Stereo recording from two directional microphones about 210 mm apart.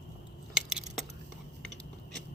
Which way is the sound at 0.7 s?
5° right (ahead or behind).